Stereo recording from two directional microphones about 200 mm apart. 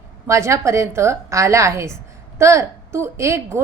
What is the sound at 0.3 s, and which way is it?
A woman's voice, 15° right (ahead or behind).